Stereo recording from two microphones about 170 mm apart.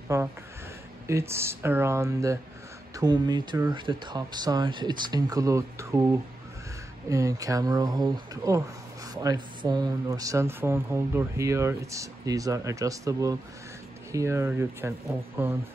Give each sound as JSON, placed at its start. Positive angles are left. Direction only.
{"t": 0.1, "sound": "speech", "side_deg": -15}
{"t": 7.1, "sound": "speech", "side_deg": -20}